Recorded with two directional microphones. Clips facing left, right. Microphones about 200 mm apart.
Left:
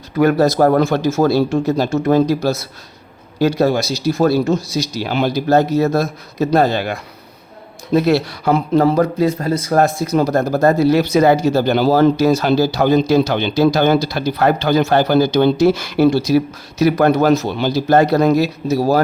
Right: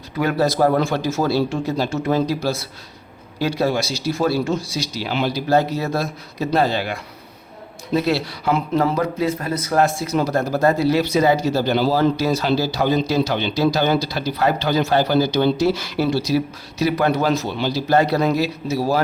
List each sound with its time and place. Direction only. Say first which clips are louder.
0.2 s speech: left 5 dB; 45° left (ahead or behind)